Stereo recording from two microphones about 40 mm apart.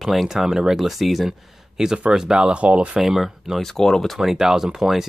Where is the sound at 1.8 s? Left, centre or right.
Centre; by 3.0 s right.